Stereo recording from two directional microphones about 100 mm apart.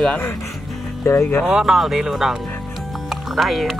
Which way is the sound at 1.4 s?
5° right (ahead or behind).